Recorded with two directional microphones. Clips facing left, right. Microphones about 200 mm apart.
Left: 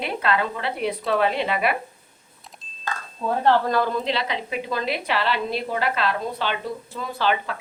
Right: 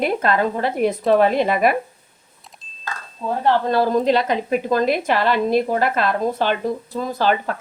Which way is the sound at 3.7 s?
35° right (ahead or behind).